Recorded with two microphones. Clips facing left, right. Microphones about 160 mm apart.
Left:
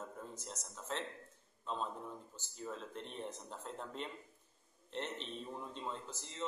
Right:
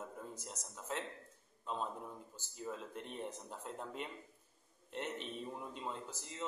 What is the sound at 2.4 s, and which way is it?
Speech, 10° right (ahead or behind).